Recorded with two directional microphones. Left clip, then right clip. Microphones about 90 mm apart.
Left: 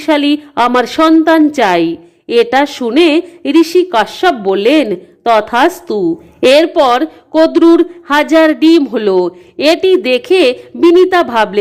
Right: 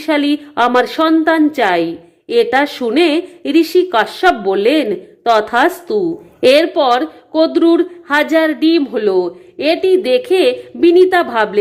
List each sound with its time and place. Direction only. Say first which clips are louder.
0.0 s a woman's voice: left 4 dB; 30° left (ahead or behind)